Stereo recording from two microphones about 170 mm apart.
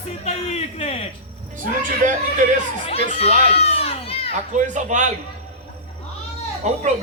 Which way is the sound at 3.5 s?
35° left (ahead or behind).